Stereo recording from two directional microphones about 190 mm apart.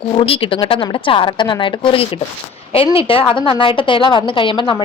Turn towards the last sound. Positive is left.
turn(degrees=25)  # may be behind; listen again after turning